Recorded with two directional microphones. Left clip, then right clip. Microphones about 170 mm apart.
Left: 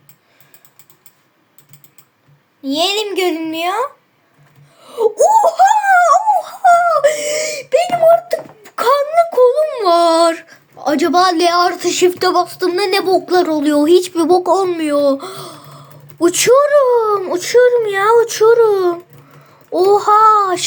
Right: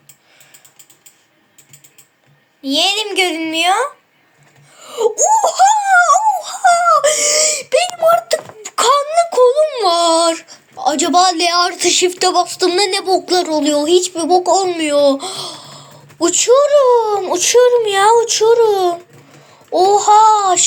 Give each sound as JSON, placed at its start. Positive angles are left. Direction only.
{"t": 2.6, "sound": "a child's voice", "side_deg": 40}
{"t": 4.8, "sound": "wail", "side_deg": 45}
{"t": 5.3, "sound": "speech", "side_deg": 40}
{"t": 5.9, "sound": "dog", "side_deg": 30}
{"t": 8.0, "sound": "wail", "side_deg": 25}
{"t": 11.4, "sound": "a woman's voice", "side_deg": 15}
{"t": 12.2, "sound": "speech", "side_deg": 30}
{"t": 13.5, "sound": "a child's voice", "side_deg": 35}
{"t": 18.2, "sound": "a child's voice", "side_deg": 45}